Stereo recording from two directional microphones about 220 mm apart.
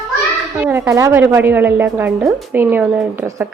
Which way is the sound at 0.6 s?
10° right (ahead or behind).